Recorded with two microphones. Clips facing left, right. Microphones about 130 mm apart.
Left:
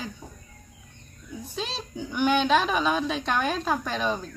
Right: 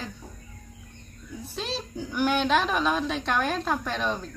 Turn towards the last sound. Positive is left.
turn(degrees=0)  # may be behind; listen again after turning